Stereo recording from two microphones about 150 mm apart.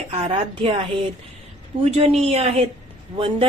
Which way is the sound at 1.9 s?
45° right (ahead or behind).